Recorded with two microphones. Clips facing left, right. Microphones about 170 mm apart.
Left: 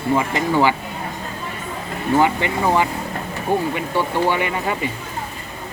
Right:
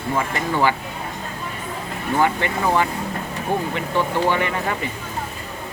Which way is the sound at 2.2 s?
15° left (ahead or behind).